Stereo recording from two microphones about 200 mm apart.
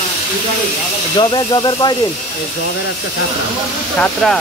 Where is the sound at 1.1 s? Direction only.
25° left (ahead or behind).